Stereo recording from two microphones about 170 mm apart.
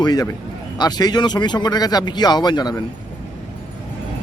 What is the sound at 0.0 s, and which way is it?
Speech, 20° left (ahead or behind).